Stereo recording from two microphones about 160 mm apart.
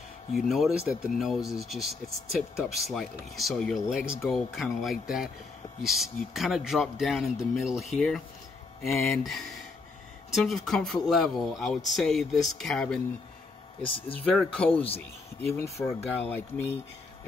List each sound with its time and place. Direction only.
0.3 s speech: centre (ahead or behind)
14.0 s speech: 10° left (ahead or behind)
15.5 s speech: 15° left (ahead or behind)